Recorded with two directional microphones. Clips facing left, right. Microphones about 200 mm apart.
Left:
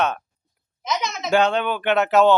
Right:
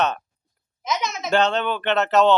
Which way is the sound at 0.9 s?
Centre (ahead or behind).